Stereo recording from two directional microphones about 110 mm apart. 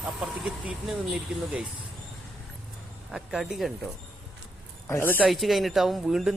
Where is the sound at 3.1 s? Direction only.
5° right (ahead or behind).